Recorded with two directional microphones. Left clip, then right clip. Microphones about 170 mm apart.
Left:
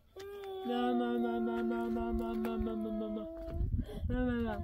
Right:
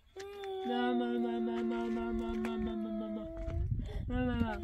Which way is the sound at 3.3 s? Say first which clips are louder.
Even; 20° right (ahead or behind).